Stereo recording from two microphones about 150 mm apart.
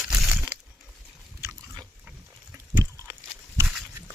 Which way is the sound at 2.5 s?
15° right (ahead or behind).